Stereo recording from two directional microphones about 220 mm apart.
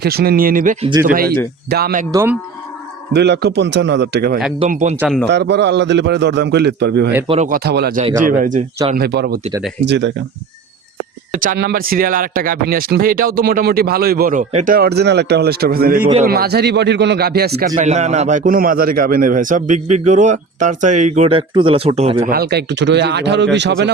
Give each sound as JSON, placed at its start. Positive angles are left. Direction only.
{"t": 0.0, "sound": "a man's voice", "side_deg": -45}
{"t": 2.1, "sound": "speech", "side_deg": -10}
{"t": 3.1, "sound": "a man's voice", "side_deg": -50}
{"t": 4.7, "sound": "a man's voice", "side_deg": -35}
{"t": 4.9, "sound": "a man's voice", "side_deg": 0}
{"t": 5.2, "sound": "a man's voice", "side_deg": -50}
{"t": 7.3, "sound": "a man's voice", "side_deg": -35}
{"t": 9.0, "sound": "a man's voice", "side_deg": -45}
{"t": 11.3, "sound": "a man's voice", "side_deg": -40}
{"t": 17.7, "sound": "a man's voice", "side_deg": -30}
{"t": 22.3, "sound": "a man's voice", "side_deg": -45}